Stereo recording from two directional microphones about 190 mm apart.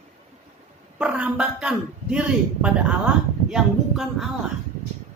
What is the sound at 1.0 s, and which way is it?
A woman's voice, 5° right (ahead or behind).